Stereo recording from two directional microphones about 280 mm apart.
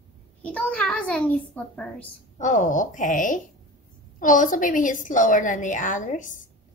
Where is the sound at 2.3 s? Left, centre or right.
Left.